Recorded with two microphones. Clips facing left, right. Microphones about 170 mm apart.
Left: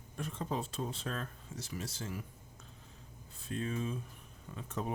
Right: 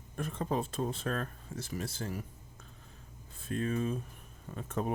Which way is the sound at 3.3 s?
55° right (ahead or behind).